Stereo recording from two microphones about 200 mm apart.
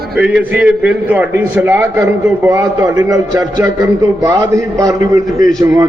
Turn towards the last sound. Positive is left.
turn(degrees=-15)  # may be behind; listen again after turning